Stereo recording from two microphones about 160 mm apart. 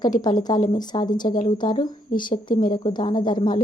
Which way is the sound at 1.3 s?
60° left (ahead or behind).